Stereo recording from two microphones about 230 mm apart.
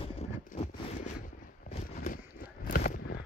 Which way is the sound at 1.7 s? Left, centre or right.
Left.